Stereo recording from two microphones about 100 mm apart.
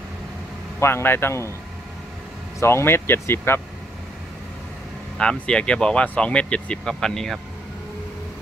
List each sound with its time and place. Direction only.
0.7 s speech: 25° left (ahead or behind)
2.6 s speech: 25° left (ahead or behind)
5.1 s speech: 10° left (ahead or behind)